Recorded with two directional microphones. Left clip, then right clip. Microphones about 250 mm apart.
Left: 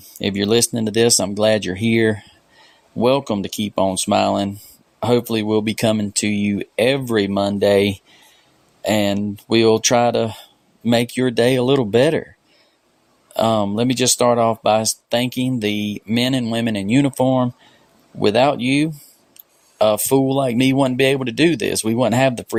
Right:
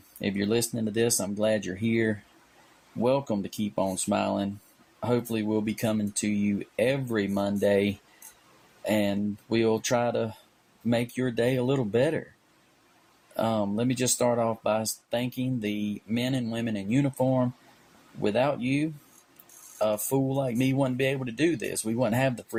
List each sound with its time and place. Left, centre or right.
0.2 s speech: left
13.3 s speech: left